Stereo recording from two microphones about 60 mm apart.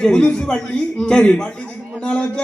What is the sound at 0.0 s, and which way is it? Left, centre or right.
A man's voice, centre.